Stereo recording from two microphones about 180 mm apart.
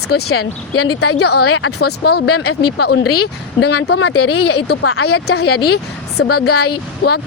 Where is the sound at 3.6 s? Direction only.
70° left (ahead or behind).